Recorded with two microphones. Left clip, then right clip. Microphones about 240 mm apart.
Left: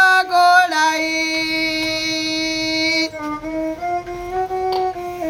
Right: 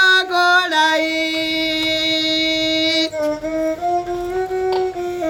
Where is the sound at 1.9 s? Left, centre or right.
Centre.